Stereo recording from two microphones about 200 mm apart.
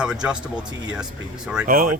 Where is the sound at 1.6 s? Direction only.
45° right (ahead or behind).